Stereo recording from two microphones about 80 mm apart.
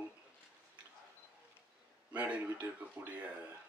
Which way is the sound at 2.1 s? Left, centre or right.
Centre.